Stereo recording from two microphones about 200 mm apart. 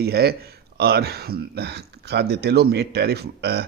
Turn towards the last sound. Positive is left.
turn(degrees=-55)  # may be behind; listen again after turning